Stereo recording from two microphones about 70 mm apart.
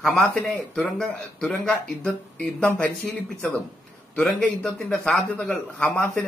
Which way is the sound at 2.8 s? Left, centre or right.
Centre.